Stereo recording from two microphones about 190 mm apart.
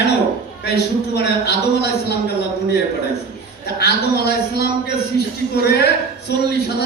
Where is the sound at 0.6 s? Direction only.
60° left (ahead or behind).